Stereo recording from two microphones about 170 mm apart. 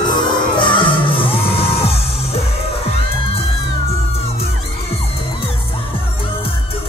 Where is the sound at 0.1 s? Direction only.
30° left (ahead or behind).